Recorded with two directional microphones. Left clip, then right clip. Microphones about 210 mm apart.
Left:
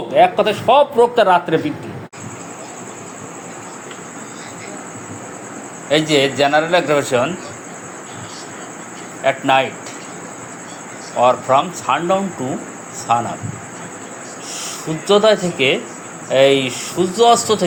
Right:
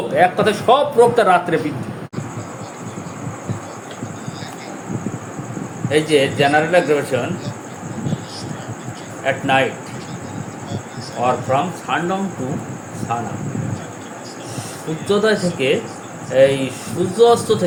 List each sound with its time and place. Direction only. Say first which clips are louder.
0.2 s a man's voice: left 3 dB; 15° left (ahead or behind)
5.9 s a man's voice: left 1 dB; 15° left (ahead or behind)
9.2 s a man's voice: left 2 dB; 15° left (ahead or behind)
11.2 s a man's voice: left 4 dB; 15° left (ahead or behind)
15.0 s a man's voice: left 4 dB; 15° left (ahead or behind)